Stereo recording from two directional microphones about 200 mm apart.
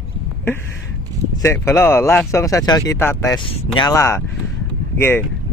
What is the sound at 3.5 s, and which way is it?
Speech, 25° left (ahead or behind).